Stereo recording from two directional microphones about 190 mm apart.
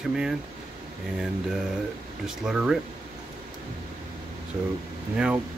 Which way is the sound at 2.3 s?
5° right (ahead or behind).